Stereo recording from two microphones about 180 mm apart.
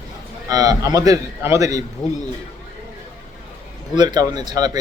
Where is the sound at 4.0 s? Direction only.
25° right (ahead or behind).